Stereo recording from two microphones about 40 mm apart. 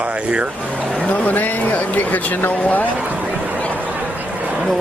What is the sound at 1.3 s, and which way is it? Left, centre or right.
Speech, left.